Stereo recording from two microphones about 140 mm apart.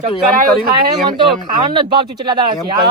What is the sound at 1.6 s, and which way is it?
Speech, 35° right (ahead or behind).